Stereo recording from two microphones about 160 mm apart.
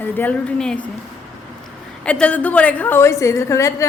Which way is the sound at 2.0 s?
10° left (ahead or behind).